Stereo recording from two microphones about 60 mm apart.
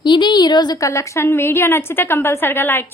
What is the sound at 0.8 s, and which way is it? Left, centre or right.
A woman's voice, left.